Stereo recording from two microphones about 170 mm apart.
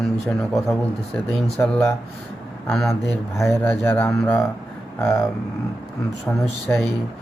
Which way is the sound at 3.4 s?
15° left (ahead or behind).